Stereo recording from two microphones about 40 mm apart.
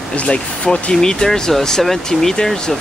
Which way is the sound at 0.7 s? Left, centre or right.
Centre.